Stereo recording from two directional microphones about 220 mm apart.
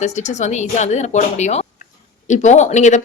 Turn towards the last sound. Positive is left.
turn(degrees=30)  # may be behind; listen again after turning